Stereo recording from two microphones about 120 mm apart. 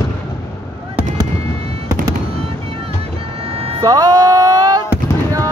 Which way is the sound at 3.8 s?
30° right (ahead or behind).